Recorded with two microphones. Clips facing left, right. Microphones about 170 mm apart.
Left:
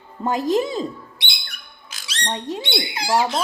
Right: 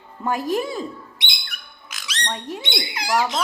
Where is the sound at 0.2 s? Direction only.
30° left (ahead or behind).